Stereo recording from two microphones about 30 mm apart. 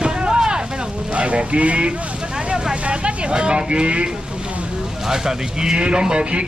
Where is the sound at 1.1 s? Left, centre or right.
Right.